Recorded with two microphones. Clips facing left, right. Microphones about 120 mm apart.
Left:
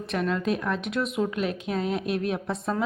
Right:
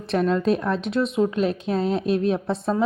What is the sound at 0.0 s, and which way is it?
Speech, 35° right (ahead or behind).